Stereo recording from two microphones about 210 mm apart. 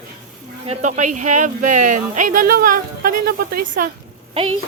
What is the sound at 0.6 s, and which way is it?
Speech, 35° right (ahead or behind).